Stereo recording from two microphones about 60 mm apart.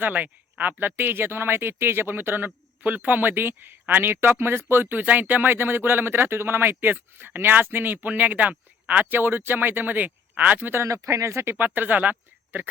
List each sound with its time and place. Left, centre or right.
0.0 s speech: right
10.8 s speech: right
11.5 s speech: right